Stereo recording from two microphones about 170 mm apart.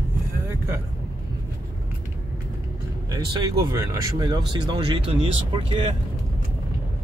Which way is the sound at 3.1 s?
20° right (ahead or behind).